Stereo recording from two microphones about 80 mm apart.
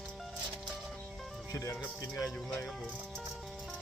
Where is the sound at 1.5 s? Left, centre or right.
Left.